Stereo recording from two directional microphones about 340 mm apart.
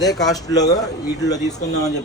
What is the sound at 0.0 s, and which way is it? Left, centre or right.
Speech, centre.